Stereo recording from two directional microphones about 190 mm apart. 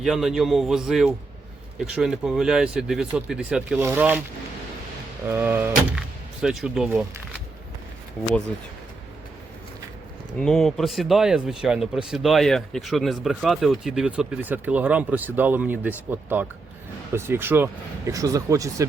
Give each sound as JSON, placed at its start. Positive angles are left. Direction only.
{"t": 0.0, "sound": "speech", "side_deg": 0}
{"t": 5.3, "sound": "speech", "side_deg": -10}
{"t": 10.3, "sound": "speech", "side_deg": 5}